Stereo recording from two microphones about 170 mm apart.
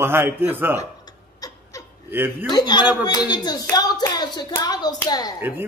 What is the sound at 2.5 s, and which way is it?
Speech, 25° left (ahead or behind).